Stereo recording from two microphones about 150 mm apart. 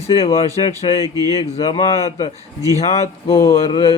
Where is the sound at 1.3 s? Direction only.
40° left (ahead or behind).